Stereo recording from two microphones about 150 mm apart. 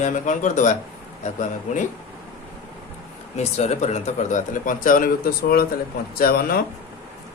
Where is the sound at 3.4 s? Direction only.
45° left (ahead or behind); by 6.6 s 90° left.